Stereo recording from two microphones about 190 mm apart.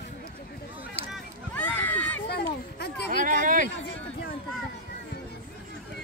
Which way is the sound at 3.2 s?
45° right (ahead or behind).